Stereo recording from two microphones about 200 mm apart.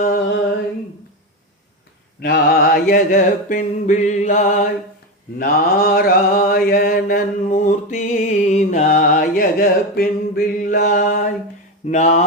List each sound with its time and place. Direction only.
2.2 s music: 50° left (ahead or behind)
5.4 s mantra: 45° left (ahead or behind)
7.9 s music: 35° left (ahead or behind)